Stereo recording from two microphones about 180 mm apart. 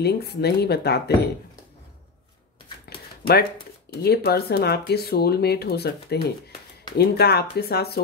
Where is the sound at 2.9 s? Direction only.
60° left (ahead or behind).